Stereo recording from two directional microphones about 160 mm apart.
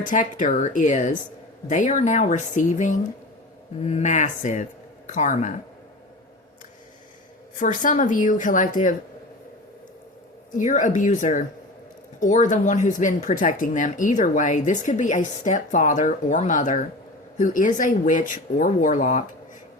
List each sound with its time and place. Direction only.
0.0 s speech: 55° left (ahead or behind)
7.6 s speech: 55° left (ahead or behind)
10.6 s speech: 50° left (ahead or behind)